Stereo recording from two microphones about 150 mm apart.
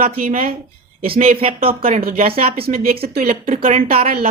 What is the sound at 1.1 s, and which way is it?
Speech, 40° right (ahead or behind).